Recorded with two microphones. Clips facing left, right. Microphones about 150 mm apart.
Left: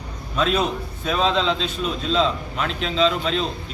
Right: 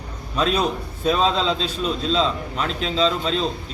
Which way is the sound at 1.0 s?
35° right (ahead or behind).